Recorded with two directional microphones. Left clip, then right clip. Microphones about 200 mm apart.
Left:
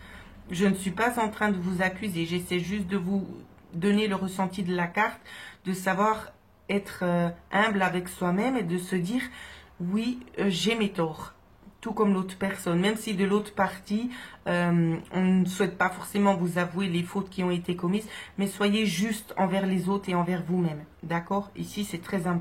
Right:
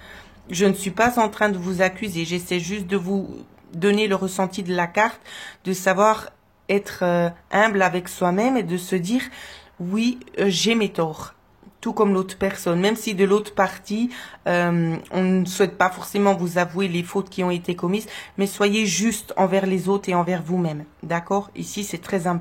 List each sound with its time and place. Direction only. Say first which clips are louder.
0.5 s speech: right 7 dB; 35° right (ahead or behind)